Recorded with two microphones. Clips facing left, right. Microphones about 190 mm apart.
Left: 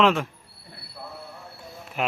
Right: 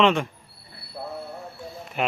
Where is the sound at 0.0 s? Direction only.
Centre (ahead or behind).